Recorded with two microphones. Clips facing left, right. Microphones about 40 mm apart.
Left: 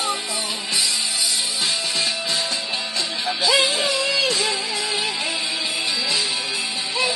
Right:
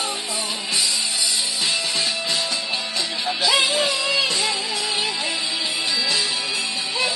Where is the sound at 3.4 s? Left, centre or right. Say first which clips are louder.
Even; right.